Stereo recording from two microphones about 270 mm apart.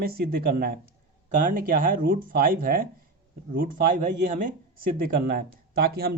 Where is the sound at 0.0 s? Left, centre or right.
Right.